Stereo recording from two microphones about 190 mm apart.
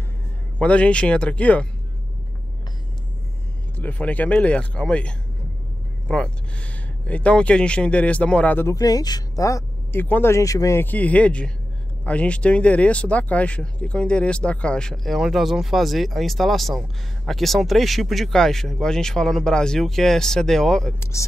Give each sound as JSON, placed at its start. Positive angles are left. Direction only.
{"t": 0.6, "sound": "speech", "side_deg": 5}
{"t": 3.7, "sound": "speech", "side_deg": 10}
{"t": 21.0, "sound": "speech", "side_deg": 15}